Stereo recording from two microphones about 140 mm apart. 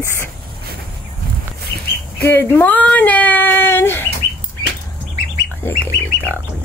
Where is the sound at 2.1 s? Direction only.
15° left (ahead or behind).